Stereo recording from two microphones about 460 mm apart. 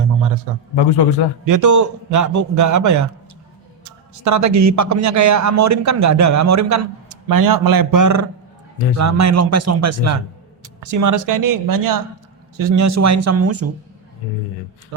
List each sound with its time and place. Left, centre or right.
1.5 s a man's voice: right